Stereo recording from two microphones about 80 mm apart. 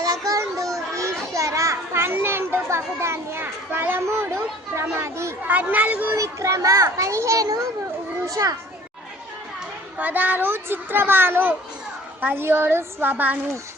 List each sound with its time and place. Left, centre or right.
0.0 s children playing: right
4.0 s a child's voice: right
5.5 s a child's voice: centre
6.1 s a child's voice: right
10.0 s a child's voice: right